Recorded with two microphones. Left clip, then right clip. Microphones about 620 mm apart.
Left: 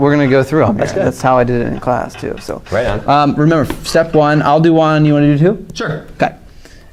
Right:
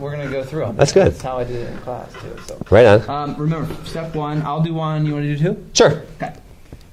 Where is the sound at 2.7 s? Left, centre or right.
Right.